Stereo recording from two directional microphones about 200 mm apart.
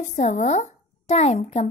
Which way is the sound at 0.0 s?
35° left (ahead or behind).